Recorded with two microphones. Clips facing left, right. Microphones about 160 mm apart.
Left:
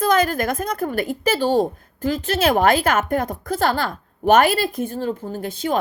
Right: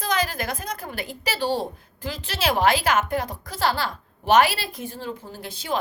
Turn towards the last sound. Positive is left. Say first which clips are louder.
# left 6 dB
turn(degrees=45)  # may be behind; listen again after turning